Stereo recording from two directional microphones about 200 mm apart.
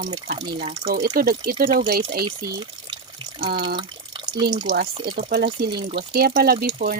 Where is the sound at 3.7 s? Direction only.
25° right (ahead or behind).